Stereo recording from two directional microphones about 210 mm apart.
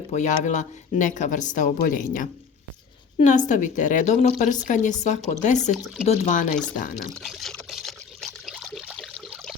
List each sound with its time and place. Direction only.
0.1 s speech: 35° left (ahead or behind)
7.2 s pour: centre (ahead or behind)